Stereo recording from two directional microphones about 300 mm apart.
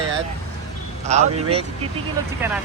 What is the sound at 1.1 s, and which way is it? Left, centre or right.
Speech, right.